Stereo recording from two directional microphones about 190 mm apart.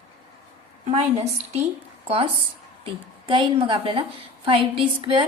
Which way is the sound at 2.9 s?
25° right (ahead or behind).